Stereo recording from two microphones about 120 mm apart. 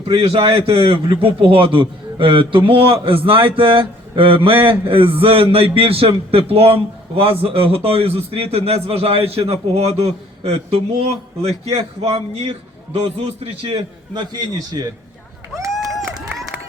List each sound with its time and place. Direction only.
0.1 s a man's voice: 50° right (ahead or behind)
14.1 s a man's voice: 35° right (ahead or behind)